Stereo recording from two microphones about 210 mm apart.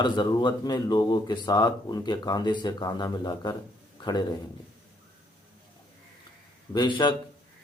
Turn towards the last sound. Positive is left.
turn(degrees=20)  # may be behind; listen again after turning